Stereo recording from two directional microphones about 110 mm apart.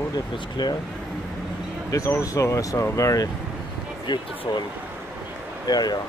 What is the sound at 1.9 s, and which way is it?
Speech, 30° left (ahead or behind).